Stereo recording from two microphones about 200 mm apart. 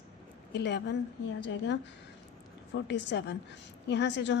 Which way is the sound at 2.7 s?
60° left (ahead or behind).